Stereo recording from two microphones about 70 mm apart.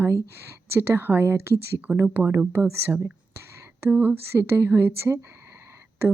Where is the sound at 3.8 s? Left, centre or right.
Right.